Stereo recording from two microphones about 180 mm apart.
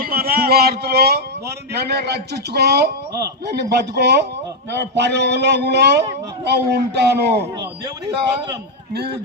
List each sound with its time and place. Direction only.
0.0 s music: 55° right (ahead or behind)
1.7 s a man's voice: 65° right (ahead or behind)
3.1 s a man's voice: 20° right (ahead or behind)
3.4 s a man's voice: 65° right (ahead or behind)